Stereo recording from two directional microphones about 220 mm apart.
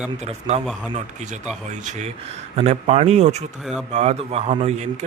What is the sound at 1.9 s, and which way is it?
A man's voice, 30° right (ahead or behind).